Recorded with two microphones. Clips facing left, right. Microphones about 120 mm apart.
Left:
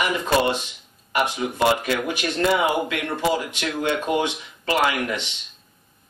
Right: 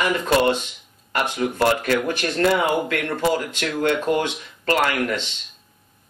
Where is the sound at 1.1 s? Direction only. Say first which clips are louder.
Even; 15° left (ahead or behind).